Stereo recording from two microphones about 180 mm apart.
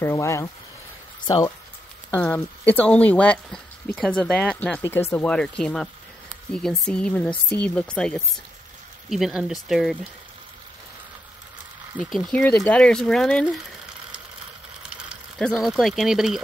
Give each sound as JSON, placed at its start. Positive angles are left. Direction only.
{"t": 0.0, "sound": "speech", "side_deg": 15}
{"t": 12.0, "sound": "speech", "side_deg": 0}
{"t": 15.0, "sound": "speech", "side_deg": 0}